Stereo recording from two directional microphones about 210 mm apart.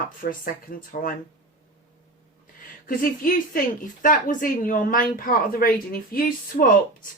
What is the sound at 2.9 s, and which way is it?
Speech, 40° left (ahead or behind).